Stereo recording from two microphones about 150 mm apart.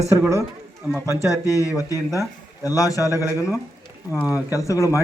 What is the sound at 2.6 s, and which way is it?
A man's voice, 25° left (ahead or behind).